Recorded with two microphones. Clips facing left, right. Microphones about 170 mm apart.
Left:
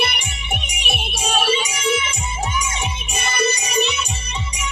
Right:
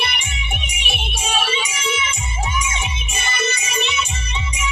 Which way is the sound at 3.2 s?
35° left (ahead or behind).